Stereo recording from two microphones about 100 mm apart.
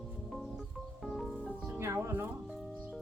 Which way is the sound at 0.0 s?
Centre (ahead or behind).